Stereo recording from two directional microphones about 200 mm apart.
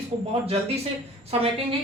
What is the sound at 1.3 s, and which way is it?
Speech, 30° right (ahead or behind).